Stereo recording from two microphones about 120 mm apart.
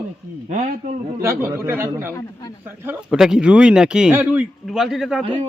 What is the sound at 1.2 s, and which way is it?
A man's voice, 20° right (ahead or behind).